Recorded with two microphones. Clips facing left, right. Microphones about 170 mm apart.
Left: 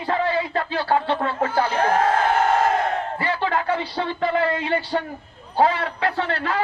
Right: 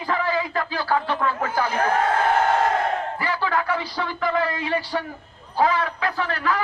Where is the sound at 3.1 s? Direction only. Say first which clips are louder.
Left 1 dB; 30° left (ahead or behind).